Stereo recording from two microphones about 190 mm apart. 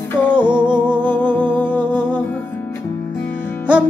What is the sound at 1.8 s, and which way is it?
Music, 25° right (ahead or behind).